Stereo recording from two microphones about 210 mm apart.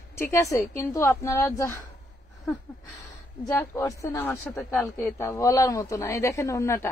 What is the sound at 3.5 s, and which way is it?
A woman's voice, 15° left (ahead or behind).